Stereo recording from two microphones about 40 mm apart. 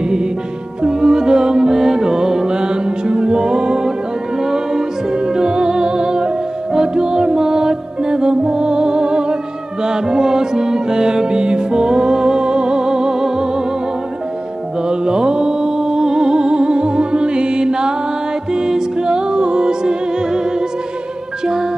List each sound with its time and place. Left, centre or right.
0.8 s music: centre
14.9 s music: centre